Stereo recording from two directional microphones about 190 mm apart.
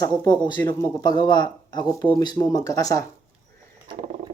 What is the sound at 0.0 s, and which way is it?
Speech, 20° left (ahead or behind).